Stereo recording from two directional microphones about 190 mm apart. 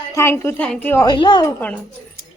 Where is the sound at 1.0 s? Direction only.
25° left (ahead or behind).